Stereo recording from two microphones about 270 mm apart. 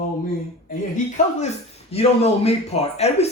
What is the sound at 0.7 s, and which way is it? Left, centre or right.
Speech, left.